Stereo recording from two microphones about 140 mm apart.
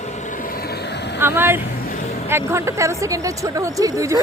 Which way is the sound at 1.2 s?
15° right (ahead or behind).